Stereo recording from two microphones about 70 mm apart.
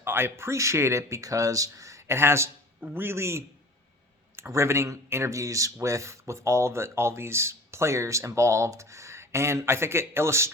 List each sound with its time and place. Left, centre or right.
0.0 s speech: right